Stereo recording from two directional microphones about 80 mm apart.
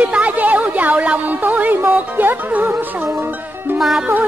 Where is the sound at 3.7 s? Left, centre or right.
Centre.